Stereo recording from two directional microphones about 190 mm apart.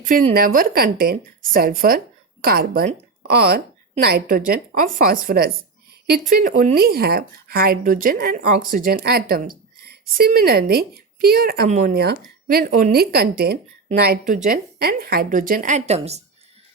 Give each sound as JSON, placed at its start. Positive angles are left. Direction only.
{"t": 0.0, "sound": "speech", "side_deg": -45}
{"t": 4.0, "sound": "speech", "side_deg": -50}
{"t": 11.7, "sound": "speech", "side_deg": -40}
{"t": 11.9, "sound": "speech", "side_deg": -55}